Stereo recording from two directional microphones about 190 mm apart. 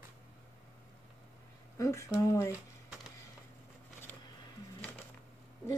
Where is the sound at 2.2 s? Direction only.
15° left (ahead or behind).